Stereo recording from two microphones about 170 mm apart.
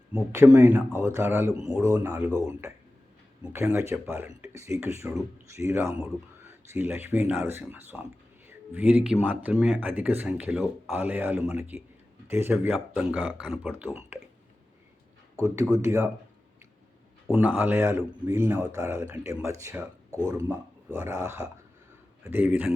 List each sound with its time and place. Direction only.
0.1 s speech: 10° right (ahead or behind)
3.5 s speech: 15° right (ahead or behind)
15.7 s speech: 15° right (ahead or behind)
17.3 s speech: 10° right (ahead or behind)